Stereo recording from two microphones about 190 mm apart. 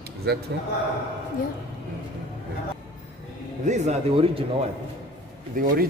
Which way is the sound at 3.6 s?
35° right (ahead or behind).